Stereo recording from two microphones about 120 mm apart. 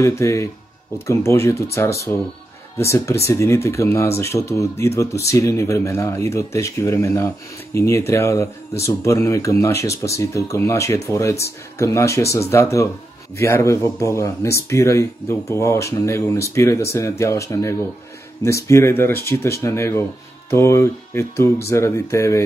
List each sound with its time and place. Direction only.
0.0 s speech: 25° left (ahead or behind)